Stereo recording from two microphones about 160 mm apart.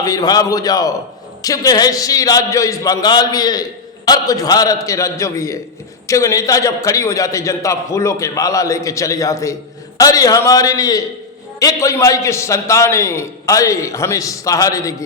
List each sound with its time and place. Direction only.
0.0 s a man's voice: 25° left (ahead or behind)